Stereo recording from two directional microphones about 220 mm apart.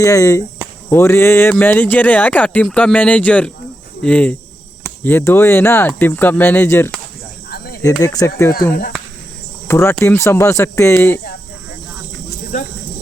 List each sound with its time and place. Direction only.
0.0 s speech: 15° left (ahead or behind)
7.5 s cricket: 45° left (ahead or behind)
7.8 s speech: 15° left (ahead or behind)
9.6 s speech: 15° left (ahead or behind)